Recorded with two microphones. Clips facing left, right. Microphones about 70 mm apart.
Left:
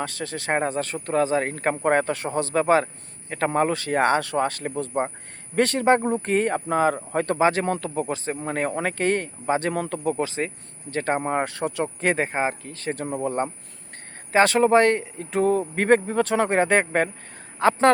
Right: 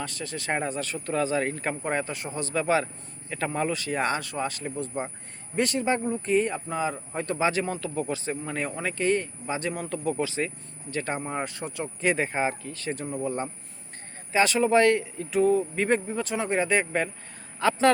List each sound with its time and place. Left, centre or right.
0.0 s speech: left
7.3 s speech: left
8.1 s speech: left
13.1 s speech: left
14.3 s speech: left